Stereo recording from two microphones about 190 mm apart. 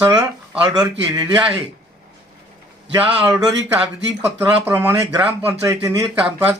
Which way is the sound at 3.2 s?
5° right (ahead or behind).